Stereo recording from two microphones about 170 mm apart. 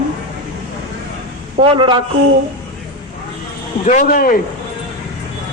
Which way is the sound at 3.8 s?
50° left (ahead or behind).